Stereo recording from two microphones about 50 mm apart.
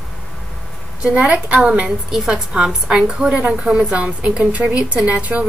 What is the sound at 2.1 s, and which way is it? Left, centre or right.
A woman's voice, centre.